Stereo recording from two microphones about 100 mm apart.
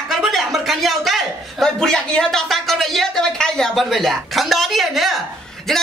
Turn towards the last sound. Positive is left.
turn(degrees=5)  # may be behind; listen again after turning